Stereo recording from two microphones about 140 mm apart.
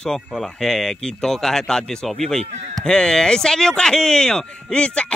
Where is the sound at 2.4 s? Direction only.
50° right (ahead or behind).